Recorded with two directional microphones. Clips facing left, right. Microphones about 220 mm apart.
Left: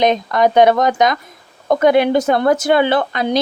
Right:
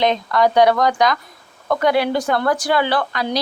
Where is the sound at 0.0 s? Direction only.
20° left (ahead or behind).